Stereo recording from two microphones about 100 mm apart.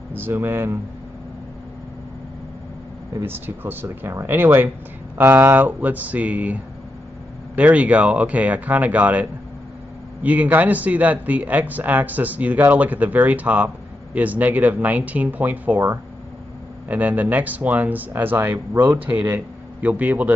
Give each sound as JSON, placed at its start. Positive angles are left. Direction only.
{"t": 0.1, "sound": "speech", "side_deg": -20}
{"t": 3.2, "sound": "speech", "side_deg": -20}